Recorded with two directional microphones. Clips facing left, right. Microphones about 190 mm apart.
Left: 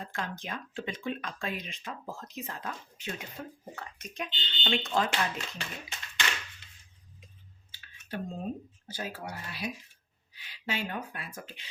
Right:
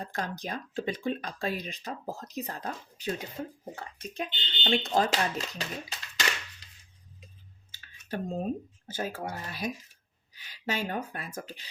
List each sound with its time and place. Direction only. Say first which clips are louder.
0.0 s speech: right 3 dB; 40° right (ahead or behind)
6.2 s a sound: right 2 dB; 40° right (ahead or behind)
8.9 s speech: right 4 dB; 50° right (ahead or behind)